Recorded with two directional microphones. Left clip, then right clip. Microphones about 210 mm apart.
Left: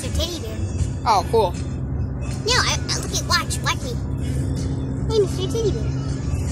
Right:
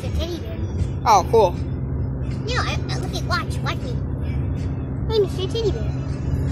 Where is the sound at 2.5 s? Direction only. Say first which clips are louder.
Left 6 dB; 45° left (ahead or behind).